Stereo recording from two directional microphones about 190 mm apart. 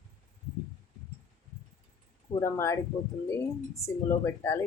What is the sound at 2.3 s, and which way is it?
Speech, 15° left (ahead or behind).